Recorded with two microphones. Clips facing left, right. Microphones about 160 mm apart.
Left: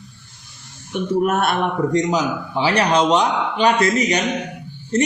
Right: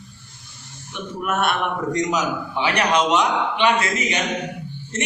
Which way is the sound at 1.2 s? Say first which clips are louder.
Left 1 dB; 35° left (ahead or behind).